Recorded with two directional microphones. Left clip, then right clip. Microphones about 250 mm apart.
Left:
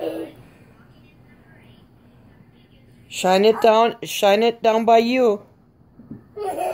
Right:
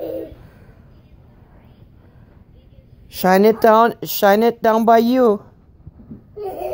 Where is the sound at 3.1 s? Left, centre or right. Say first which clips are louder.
Right 2 dB; right.